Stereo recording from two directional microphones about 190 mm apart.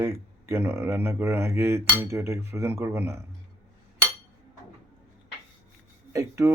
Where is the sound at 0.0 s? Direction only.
15° right (ahead or behind).